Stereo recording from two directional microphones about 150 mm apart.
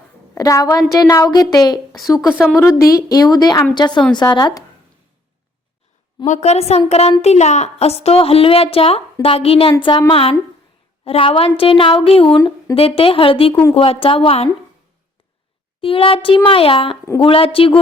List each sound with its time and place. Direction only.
0.3 s a woman's voice: 25° left (ahead or behind)
2.0 s a woman's voice: centre (ahead or behind)
2.6 s a woman's voice: 20° left (ahead or behind)
6.2 s a child's voice: 50° left (ahead or behind)
12.4 s speech: 20° left (ahead or behind)
12.7 s speech: 40° left (ahead or behind)
15.8 s speech: 35° left (ahead or behind)